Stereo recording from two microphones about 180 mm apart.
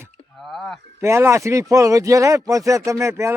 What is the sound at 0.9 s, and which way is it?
Speech, 15° right (ahead or behind).